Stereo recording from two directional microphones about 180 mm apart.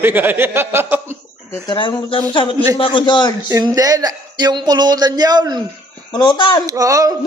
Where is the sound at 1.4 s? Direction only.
20° left (ahead or behind).